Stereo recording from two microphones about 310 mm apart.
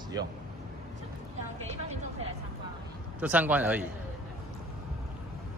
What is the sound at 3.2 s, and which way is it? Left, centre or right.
Speech, centre.